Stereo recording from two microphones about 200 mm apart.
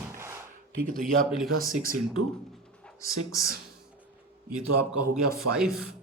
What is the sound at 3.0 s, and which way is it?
Speech, 15° left (ahead or behind).